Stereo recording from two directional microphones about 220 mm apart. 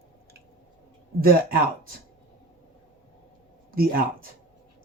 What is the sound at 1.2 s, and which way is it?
Speech, 40° right (ahead or behind).